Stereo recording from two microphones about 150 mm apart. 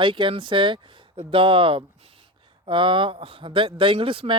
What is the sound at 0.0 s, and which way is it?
A man's voice, 35° right (ahead or behind).